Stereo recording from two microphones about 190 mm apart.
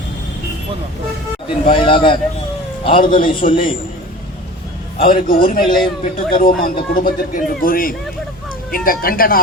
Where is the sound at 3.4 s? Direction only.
40° left (ahead or behind).